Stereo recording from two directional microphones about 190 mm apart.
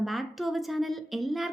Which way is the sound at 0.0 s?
Centre (ahead or behind).